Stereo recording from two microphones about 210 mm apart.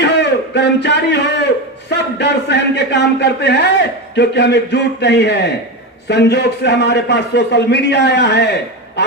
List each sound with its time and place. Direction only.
0.0 s a man's voice: 55° left (ahead or behind)